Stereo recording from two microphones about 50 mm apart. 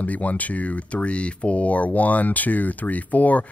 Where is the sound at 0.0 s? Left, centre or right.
Left.